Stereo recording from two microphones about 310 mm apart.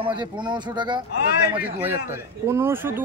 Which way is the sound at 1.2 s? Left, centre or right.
Left.